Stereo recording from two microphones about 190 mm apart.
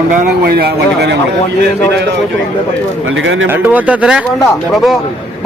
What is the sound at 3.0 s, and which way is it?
Speech, 90° right.